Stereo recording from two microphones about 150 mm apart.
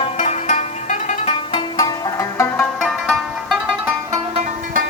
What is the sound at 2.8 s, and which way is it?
Music, centre (ahead or behind).